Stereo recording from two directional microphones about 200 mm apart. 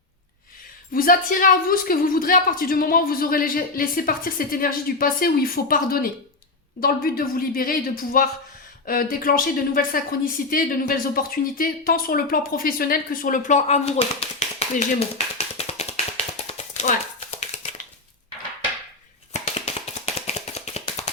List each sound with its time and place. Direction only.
0.9 s a woman's voice: 45° left (ahead or behind)
19.3 s tap: 35° left (ahead or behind)